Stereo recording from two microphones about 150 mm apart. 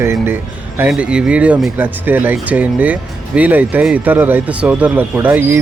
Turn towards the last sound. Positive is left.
turn(degrees=-15)  # may be behind; listen again after turning